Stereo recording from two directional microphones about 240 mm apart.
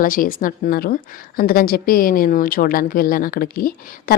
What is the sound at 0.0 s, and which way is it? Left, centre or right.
A woman's voice, left.